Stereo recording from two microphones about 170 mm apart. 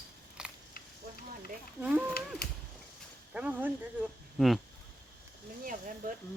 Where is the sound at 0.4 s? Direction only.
5° right (ahead or behind).